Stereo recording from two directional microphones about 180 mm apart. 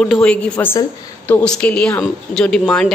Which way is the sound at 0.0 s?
5° left (ahead or behind).